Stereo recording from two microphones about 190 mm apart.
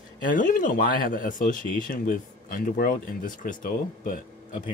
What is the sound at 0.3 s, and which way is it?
Speech, 45° left (ahead or behind).